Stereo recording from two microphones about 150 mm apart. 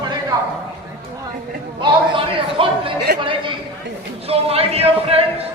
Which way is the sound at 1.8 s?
35° right (ahead or behind).